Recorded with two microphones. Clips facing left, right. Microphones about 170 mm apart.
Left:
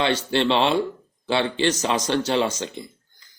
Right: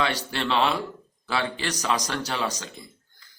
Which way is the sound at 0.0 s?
25° left (ahead or behind).